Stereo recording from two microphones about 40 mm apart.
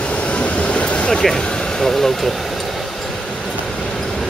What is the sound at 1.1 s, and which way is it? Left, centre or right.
Speech, centre.